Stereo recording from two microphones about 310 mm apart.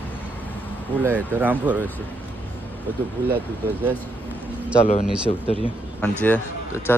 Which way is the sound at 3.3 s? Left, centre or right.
Centre.